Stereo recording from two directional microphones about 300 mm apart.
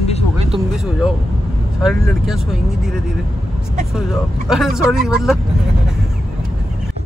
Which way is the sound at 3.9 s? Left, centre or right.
Centre.